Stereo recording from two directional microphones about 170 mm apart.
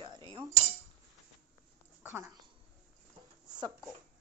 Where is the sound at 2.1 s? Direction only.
15° right (ahead or behind).